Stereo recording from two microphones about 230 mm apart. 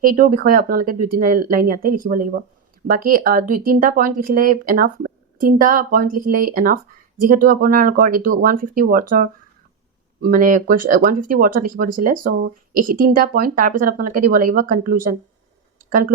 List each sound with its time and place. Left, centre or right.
0.0 s speech: right